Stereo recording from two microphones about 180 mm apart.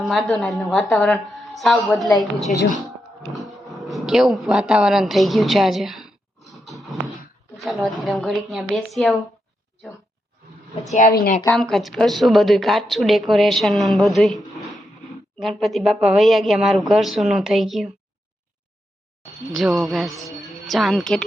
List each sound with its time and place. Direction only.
0.0 s speech: centre (ahead or behind)
3.8 s speech: centre (ahead or behind)
7.5 s a sound: centre (ahead or behind)
8.0 s speech: centre (ahead or behind)
10.8 s a woman's voice: 45° left (ahead or behind)
11.4 s speech: 5° left (ahead or behind)
19.5 s speech: centre (ahead or behind)